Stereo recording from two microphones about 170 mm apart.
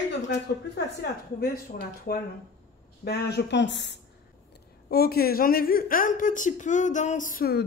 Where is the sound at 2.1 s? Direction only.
60° left (ahead or behind).